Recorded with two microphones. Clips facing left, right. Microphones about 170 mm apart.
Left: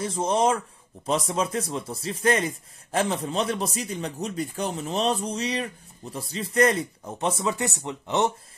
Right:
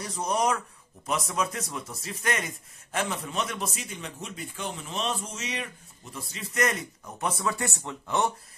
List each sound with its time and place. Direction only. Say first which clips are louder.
0.0 s speech: left 4 dB; 25° left (ahead or behind)